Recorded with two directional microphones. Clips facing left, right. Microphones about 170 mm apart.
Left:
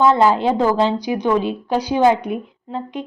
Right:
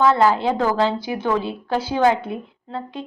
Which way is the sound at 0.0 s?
20° left (ahead or behind).